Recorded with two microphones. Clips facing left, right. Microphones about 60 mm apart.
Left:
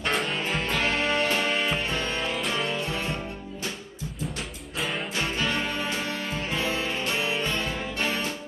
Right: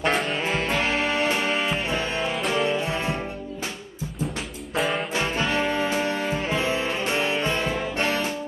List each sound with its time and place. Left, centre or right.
0.1 s music: centre
0.7 s music: centre
2.7 s music: right
4.7 s music: centre
5.1 s music: right